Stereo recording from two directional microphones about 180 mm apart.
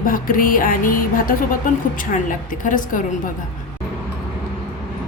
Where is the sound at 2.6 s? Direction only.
45° left (ahead or behind).